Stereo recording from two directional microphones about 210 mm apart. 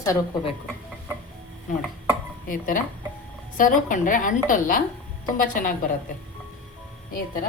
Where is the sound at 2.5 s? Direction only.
40° left (ahead or behind).